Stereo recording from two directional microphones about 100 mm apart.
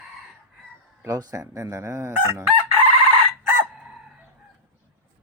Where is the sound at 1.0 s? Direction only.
35° right (ahead or behind).